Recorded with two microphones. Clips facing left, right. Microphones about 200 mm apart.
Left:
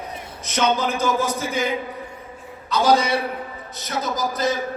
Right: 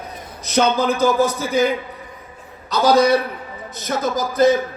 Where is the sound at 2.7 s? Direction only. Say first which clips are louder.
Right 4 dB; 40° right (ahead or behind).